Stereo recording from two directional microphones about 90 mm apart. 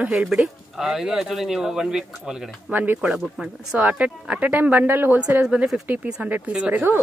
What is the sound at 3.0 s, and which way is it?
Speech, 5° right (ahead or behind).